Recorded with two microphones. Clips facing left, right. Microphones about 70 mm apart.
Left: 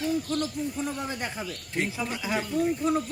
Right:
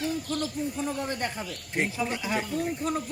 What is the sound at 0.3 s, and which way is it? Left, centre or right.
Speech, left.